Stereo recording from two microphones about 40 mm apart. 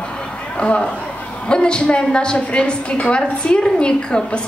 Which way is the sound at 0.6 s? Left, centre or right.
Left.